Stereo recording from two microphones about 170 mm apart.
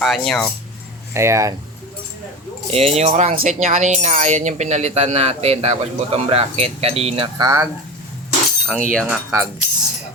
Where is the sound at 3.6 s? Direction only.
40° right (ahead or behind).